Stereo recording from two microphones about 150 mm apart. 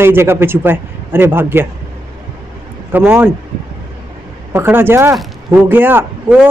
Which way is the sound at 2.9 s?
10° right (ahead or behind).